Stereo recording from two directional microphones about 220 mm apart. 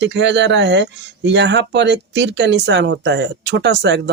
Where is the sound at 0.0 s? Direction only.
50° right (ahead or behind).